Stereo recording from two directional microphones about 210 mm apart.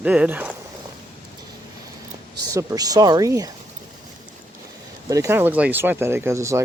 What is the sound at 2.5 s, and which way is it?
Speech, 15° right (ahead or behind).